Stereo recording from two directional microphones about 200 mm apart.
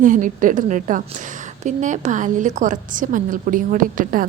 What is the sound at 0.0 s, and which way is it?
A woman's voice, 40° right (ahead or behind).